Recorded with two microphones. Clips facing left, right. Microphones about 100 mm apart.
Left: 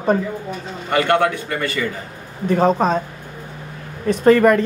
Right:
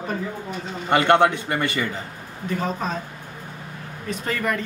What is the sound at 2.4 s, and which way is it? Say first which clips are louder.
Speech: left 10 dB; 60° left (ahead or behind).